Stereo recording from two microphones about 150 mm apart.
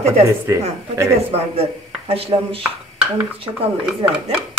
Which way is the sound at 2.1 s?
40° right (ahead or behind).